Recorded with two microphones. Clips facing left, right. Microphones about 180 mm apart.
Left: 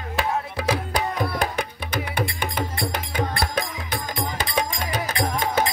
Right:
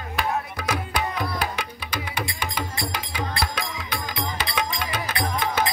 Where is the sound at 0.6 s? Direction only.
35° left (ahead or behind).